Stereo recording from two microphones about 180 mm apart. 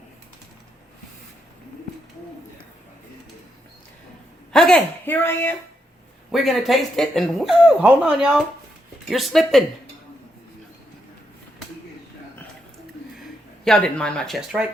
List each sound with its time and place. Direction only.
4.5 s speech: 5° left (ahead or behind)
6.3 s speech: centre (ahead or behind)
13.7 s speech: 5° left (ahead or behind)